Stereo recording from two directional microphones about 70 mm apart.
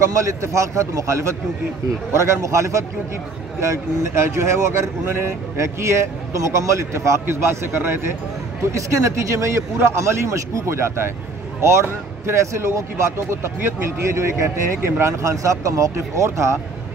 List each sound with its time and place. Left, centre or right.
0.0 s speech: right
8.7 s speech: right
12.3 s speech: right